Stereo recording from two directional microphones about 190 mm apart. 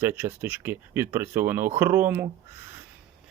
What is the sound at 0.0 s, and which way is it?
Speech, 10° right (ahead or behind).